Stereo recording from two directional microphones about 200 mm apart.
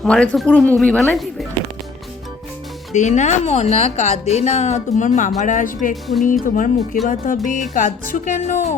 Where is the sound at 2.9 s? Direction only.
35° left (ahead or behind).